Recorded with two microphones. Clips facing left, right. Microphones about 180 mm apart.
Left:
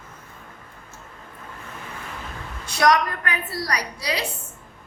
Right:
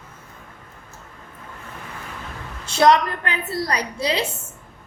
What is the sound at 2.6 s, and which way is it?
A woman's voice, 25° right (ahead or behind).